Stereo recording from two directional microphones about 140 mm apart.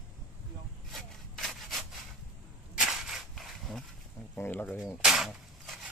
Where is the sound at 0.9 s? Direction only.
Centre (ahead or behind).